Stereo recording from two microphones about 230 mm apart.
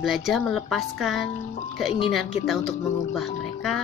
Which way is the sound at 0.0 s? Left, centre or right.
Centre.